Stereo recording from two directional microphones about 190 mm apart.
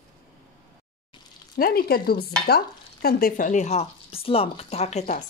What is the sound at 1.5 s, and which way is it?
Stir, 50° left (ahead or behind).